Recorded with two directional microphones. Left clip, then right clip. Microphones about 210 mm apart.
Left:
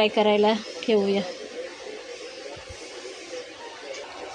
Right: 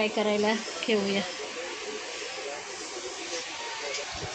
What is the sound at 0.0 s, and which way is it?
Speech, 35° left (ahead or behind).